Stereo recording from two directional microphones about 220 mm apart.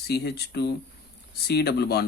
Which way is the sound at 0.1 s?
50° left (ahead or behind).